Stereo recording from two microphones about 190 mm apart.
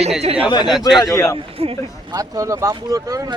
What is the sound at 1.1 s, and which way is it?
Speech, 15° left (ahead or behind).